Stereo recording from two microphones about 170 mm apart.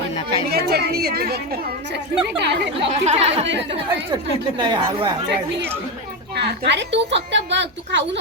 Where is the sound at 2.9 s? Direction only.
40° right (ahead or behind).